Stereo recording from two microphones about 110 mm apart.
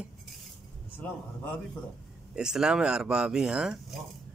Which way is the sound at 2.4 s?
5° right (ahead or behind).